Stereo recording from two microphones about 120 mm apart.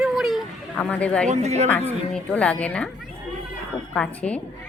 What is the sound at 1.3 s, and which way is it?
Speech, 70° right (ahead or behind).